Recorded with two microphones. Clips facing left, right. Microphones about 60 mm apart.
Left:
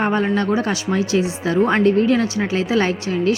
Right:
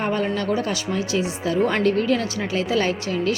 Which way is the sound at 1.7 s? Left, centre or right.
Left.